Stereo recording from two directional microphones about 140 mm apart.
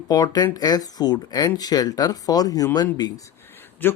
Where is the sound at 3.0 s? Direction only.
20° left (ahead or behind).